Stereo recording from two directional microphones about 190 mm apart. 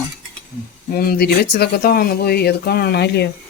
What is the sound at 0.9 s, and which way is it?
Speech, 55° left (ahead or behind).